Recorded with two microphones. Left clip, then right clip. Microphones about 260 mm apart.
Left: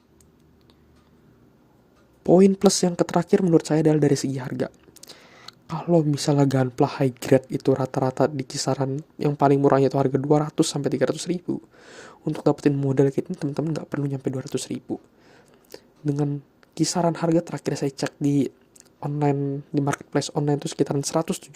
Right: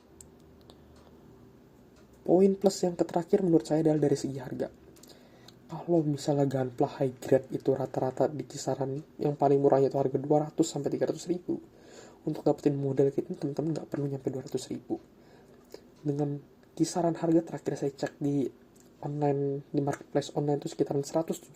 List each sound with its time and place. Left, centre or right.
2.8 s speech: left
15.7 s a sound: left
16.7 s speech: left